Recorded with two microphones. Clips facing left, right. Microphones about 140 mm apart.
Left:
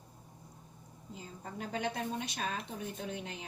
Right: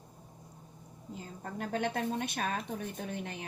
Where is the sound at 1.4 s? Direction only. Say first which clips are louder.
Right 3 dB; 55° right (ahead or behind).